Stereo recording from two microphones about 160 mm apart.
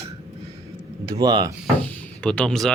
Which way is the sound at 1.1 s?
25° right (ahead or behind).